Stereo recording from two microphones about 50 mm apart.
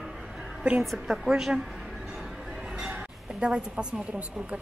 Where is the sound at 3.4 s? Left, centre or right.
Centre.